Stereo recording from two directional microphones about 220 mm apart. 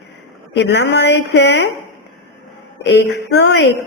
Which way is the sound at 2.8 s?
50° left (ahead or behind).